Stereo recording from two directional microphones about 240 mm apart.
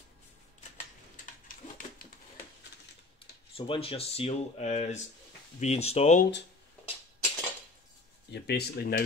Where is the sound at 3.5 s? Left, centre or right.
Left.